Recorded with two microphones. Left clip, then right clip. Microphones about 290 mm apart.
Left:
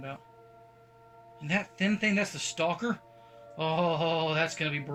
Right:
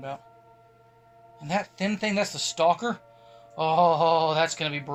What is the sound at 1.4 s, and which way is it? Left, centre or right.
Speech, centre.